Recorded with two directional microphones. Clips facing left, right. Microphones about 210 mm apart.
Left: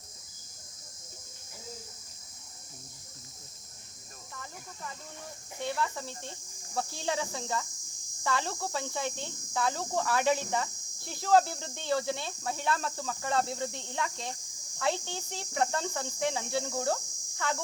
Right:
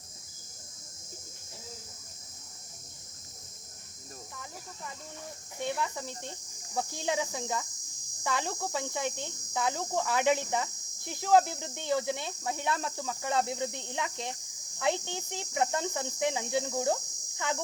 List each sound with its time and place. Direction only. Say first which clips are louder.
5.6 s speech: even; 15° right (ahead or behind)